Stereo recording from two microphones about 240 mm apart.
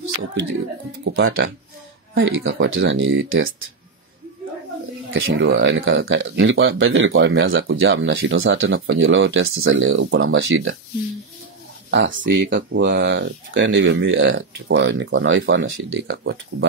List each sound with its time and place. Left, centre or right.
1.0 s speech: right
5.1 s speech: right
11.9 s speech: right